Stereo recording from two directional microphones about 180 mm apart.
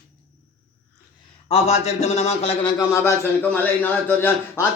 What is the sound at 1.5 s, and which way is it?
A man's voice, 35° left (ahead or behind).